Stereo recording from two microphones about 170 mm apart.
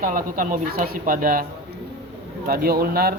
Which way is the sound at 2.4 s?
60° right (ahead or behind).